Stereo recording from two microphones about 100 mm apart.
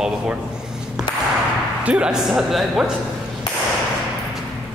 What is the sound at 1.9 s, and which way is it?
A woman's voice, 10° right (ahead or behind).